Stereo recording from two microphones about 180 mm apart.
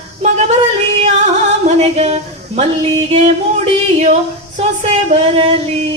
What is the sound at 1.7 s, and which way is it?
Speech, 40° right (ahead or behind).